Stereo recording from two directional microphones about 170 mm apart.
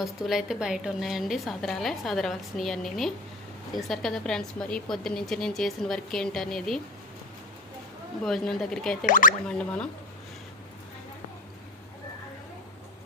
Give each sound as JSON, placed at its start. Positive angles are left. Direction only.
{"t": 0.0, "sound": "a woman's voice", "side_deg": 0}
{"t": 8.2, "sound": "a woman's voice", "side_deg": 0}
{"t": 9.0, "sound": "speech", "side_deg": 50}
{"t": 9.5, "sound": "a woman's voice", "side_deg": 5}